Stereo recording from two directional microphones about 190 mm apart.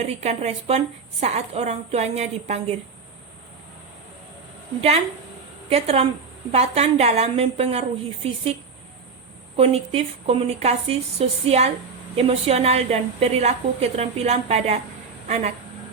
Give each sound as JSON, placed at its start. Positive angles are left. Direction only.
{"t": 0.0, "sound": "a woman's voice", "side_deg": -35}
{"t": 5.6, "sound": "a woman's voice", "side_deg": -35}
{"t": 9.6, "sound": "a woman's voice", "side_deg": -30}